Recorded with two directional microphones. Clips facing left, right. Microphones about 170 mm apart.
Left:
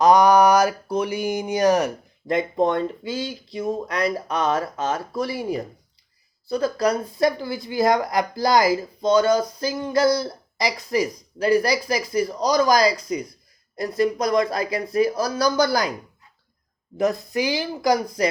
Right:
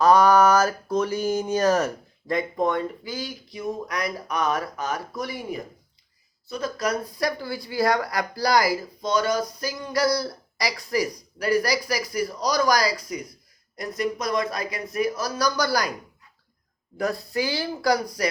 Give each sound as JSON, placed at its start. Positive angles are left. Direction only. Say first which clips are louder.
{"t": 0.0, "sound": "speech", "louder": "left 2 dB", "side_deg": 15}
{"t": 17.0, "sound": "speech", "louder": "left 4 dB", "side_deg": 20}